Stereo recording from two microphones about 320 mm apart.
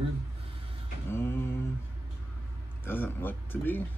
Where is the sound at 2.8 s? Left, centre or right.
Centre.